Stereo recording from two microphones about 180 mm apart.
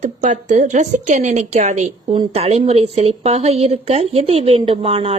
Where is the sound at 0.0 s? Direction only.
40° right (ahead or behind).